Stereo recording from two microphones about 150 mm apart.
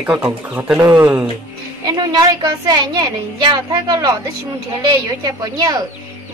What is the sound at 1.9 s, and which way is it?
A woman's voice, 30° right (ahead or behind).